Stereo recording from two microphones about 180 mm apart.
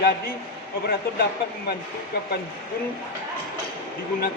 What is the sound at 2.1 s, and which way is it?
Speech, 60° left (ahead or behind).